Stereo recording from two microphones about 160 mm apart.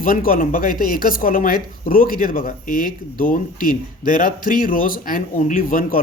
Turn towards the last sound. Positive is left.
turn(degrees=60)  # may be behind; listen again after turning